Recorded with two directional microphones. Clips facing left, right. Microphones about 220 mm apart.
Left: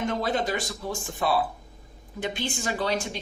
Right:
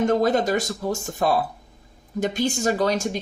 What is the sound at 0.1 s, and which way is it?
Speech, 45° right (ahead or behind).